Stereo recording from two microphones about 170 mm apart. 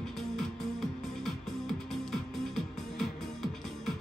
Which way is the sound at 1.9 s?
Centre (ahead or behind).